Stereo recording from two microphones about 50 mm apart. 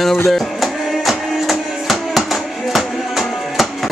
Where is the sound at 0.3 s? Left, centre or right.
Centre.